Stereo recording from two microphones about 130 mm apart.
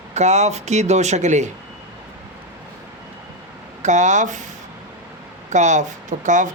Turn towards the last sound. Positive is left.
turn(degrees=-75)  # may be behind; listen again after turning